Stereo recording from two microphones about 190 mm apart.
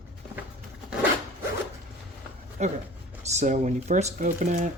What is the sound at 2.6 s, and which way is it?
Speech, 40° right (ahead or behind).